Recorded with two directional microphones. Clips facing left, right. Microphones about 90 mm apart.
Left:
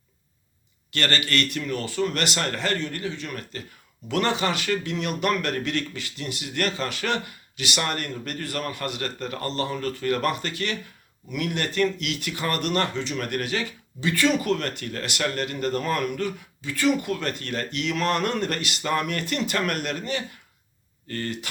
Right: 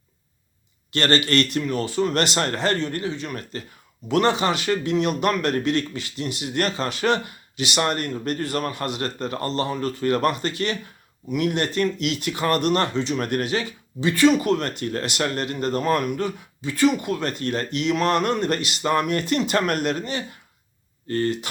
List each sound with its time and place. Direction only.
0.9 s speech: 25° right (ahead or behind)